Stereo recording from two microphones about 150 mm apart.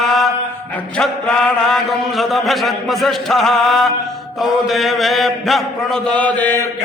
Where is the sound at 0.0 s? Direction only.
Centre (ahead or behind).